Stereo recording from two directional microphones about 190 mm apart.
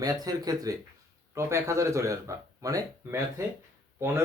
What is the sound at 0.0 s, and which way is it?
Speech, 20° right (ahead or behind).